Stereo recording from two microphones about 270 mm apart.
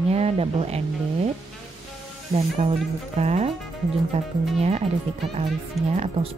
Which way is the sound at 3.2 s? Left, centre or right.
Right.